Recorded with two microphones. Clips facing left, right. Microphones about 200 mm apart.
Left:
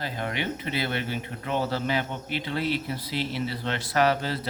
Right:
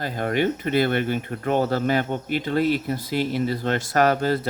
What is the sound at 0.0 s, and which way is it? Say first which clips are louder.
Speech: right 8 dB; 50° right (ahead or behind).